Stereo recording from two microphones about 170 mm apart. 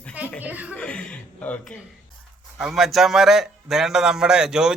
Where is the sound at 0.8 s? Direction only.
5° left (ahead or behind).